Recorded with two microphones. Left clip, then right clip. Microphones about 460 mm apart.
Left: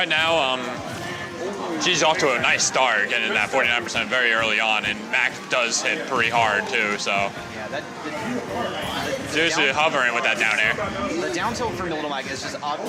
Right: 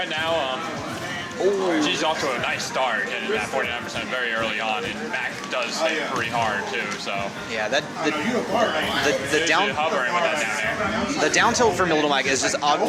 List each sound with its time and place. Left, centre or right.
0.0 s music: left
1.8 s speech: left
9.4 s speech: left
11.3 s speech: right